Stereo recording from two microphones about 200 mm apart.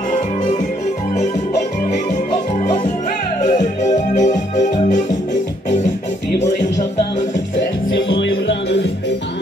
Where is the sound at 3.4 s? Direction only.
35° left (ahead or behind).